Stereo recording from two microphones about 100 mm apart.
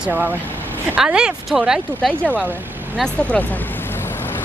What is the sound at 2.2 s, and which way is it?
Speech, 15° right (ahead or behind).